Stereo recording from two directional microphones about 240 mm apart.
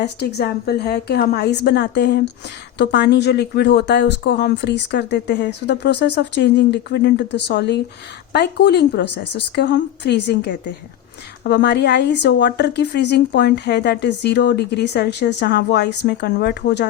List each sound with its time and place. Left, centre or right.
0.0 s a woman's voice: left